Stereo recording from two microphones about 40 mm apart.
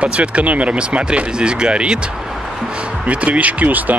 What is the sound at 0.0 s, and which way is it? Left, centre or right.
Speech, right.